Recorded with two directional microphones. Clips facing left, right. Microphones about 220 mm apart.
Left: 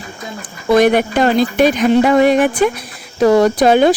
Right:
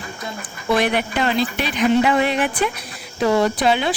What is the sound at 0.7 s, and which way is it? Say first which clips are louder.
Speech: left 8 dB; 45° left (ahead or behind).